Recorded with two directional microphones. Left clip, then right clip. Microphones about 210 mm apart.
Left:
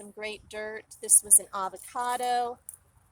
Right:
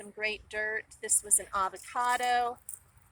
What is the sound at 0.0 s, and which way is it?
Speech, 55° left (ahead or behind).